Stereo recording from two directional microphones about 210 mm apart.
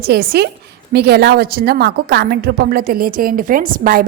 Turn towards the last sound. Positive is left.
turn(degrees=-40)  # may be behind; listen again after turning